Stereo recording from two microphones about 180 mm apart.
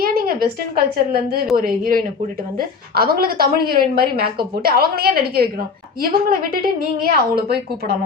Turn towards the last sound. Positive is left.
turn(degrees=-60)  # may be behind; listen again after turning